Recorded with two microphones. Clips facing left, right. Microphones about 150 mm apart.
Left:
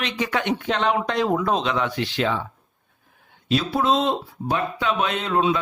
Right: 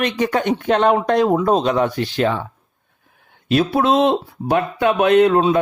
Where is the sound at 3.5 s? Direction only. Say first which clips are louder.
Right 5 dB; 60° right (ahead or behind).